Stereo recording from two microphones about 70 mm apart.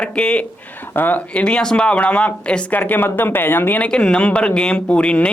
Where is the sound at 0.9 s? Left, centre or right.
Left.